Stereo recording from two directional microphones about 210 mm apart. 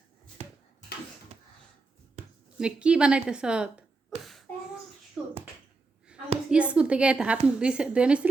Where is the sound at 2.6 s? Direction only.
5° right (ahead or behind).